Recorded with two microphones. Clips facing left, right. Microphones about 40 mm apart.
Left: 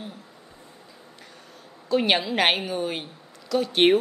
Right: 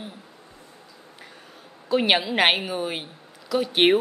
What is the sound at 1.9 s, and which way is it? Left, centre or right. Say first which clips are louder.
A woman's voice: right 1 dB; centre.